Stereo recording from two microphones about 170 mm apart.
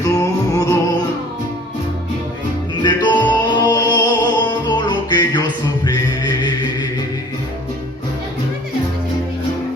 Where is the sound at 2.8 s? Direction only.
25° left (ahead or behind).